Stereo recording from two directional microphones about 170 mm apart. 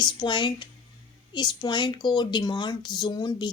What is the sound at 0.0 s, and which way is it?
Speech, 25° left (ahead or behind).